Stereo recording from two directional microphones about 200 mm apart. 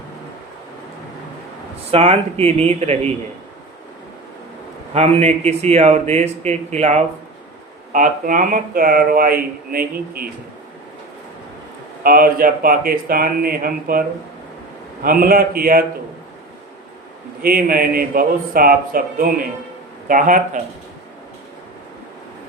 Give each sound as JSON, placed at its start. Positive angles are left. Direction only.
{"t": 1.9, "sound": "speech", "side_deg": -30}
{"t": 4.9, "sound": "speech", "side_deg": -30}
{"t": 12.0, "sound": "speech", "side_deg": -45}
{"t": 15.0, "sound": "speech", "side_deg": -45}
{"t": 17.4, "sound": "speech", "side_deg": -45}